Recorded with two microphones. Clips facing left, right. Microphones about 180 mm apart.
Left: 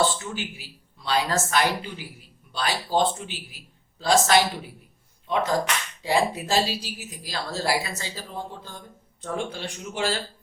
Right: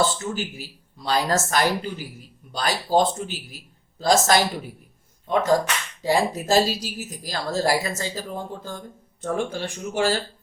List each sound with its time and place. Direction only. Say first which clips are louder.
0.0 s a woman's voice: right 2 dB; 40° right (ahead or behind)